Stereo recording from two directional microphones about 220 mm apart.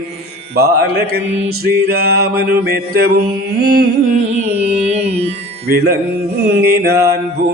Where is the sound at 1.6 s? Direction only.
45° right (ahead or behind).